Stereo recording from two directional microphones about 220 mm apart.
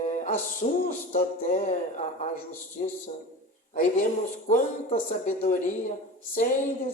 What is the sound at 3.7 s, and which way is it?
Speech, 35° left (ahead or behind).